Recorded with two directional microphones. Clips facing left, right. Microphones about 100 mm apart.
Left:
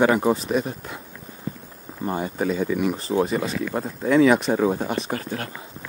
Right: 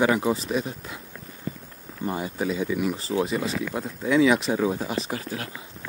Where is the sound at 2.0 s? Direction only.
35° left (ahead or behind).